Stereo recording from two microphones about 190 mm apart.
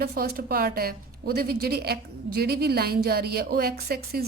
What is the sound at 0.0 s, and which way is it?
A woman's voice, 55° right (ahead or behind).